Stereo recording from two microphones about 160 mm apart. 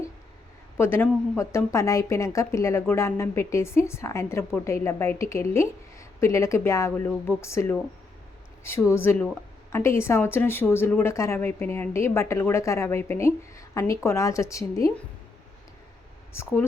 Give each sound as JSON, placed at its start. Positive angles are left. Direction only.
{"t": 0.8, "sound": "speech", "side_deg": 15}
{"t": 16.3, "sound": "speech", "side_deg": 15}